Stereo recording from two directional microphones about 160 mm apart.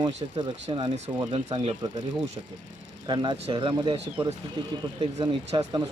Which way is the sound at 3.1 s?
35° right (ahead or behind).